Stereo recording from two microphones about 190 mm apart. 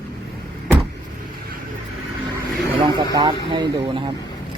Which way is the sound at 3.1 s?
25° right (ahead or behind).